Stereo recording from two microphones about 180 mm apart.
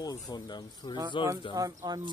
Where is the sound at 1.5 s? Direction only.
20° right (ahead or behind).